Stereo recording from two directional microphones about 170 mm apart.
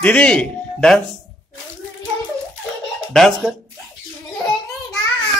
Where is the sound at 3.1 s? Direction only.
Centre (ahead or behind).